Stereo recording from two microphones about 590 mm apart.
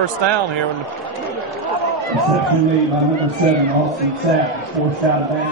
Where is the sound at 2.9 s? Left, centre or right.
Centre.